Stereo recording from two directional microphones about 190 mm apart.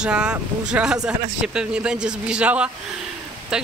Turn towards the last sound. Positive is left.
turn(degrees=-5)  # may be behind; listen again after turning